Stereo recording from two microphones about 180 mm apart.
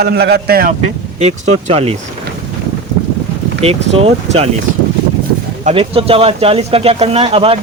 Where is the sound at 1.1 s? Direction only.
35° right (ahead or behind).